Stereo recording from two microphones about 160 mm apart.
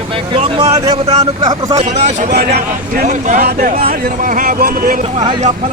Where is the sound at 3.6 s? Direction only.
70° right (ahead or behind).